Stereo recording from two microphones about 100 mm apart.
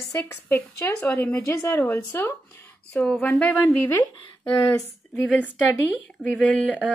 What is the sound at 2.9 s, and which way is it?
Speech, 10° left (ahead or behind).